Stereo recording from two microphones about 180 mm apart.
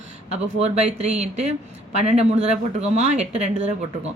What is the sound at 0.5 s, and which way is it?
Speech, 35° right (ahead or behind).